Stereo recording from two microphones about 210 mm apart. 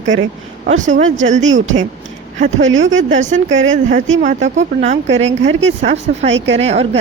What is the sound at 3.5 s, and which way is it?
Speech, 65° right (ahead or behind).